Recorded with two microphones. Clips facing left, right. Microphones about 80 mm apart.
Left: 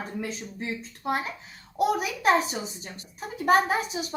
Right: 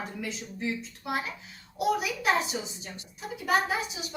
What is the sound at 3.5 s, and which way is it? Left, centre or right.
Speech, left.